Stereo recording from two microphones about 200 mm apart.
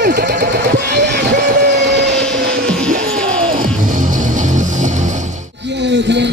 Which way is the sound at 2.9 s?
45° right (ahead or behind).